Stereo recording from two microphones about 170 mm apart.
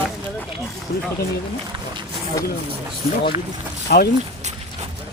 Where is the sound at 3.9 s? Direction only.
60° left (ahead or behind).